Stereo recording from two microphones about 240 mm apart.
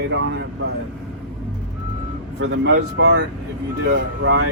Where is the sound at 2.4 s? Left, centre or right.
Right.